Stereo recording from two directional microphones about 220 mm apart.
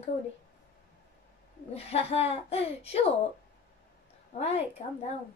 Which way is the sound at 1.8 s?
30° left (ahead or behind).